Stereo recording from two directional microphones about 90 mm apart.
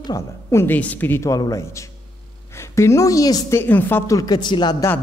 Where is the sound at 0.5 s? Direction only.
30° left (ahead or behind).